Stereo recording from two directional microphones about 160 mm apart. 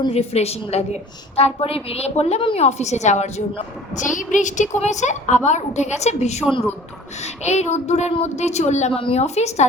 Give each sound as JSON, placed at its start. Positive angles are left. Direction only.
{"t": 0.1, "sound": "a woman's voice", "side_deg": 40}
{"t": 7.4, "sound": "a woman's voice", "side_deg": 45}